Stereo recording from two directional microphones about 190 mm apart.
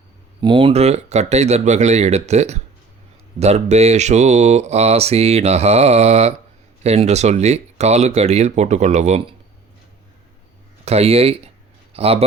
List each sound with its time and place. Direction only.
0.4 s speech: 25° right (ahead or behind)
10.8 s speech: 30° right (ahead or behind)